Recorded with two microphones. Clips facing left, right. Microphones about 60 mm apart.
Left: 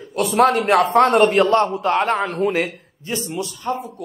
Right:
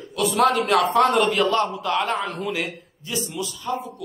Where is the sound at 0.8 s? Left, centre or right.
Left.